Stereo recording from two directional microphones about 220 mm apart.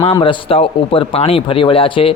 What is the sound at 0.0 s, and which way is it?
Speech, 25° left (ahead or behind).